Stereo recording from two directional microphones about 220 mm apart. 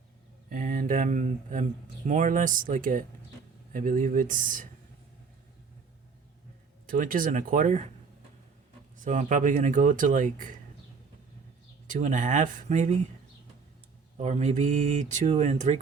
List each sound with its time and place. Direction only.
0.5 s speech: 35° right (ahead or behind)
6.8 s speech: 40° right (ahead or behind)
9.0 s speech: 35° right (ahead or behind)
11.9 s speech: 35° right (ahead or behind)
14.2 s speech: 30° right (ahead or behind)